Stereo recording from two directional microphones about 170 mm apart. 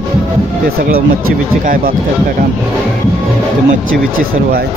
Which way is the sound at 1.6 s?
55° right (ahead or behind).